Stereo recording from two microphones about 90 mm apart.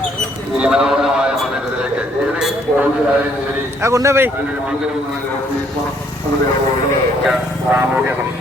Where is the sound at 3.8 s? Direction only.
30° right (ahead or behind).